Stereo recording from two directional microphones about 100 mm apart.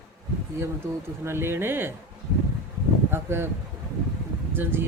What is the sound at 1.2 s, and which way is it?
Speech, 25° right (ahead or behind).